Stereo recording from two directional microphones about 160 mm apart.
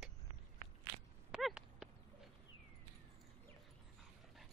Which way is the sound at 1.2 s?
5° right (ahead or behind).